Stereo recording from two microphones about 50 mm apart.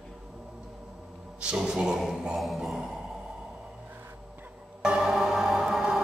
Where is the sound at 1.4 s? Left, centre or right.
Centre.